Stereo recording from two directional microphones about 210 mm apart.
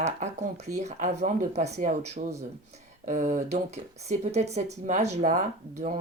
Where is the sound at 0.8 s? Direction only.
35° right (ahead or behind).